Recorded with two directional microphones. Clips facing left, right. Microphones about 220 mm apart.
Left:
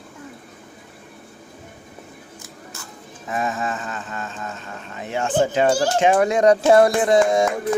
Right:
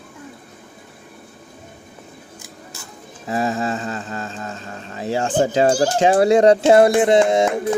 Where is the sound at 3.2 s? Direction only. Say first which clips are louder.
Right 4 dB; 30° right (ahead or behind).